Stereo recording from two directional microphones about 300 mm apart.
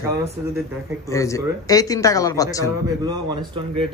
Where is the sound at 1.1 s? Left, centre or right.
Centre.